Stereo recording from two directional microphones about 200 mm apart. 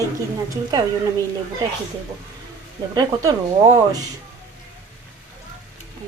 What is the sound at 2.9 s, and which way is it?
Speech, 20° right (ahead or behind).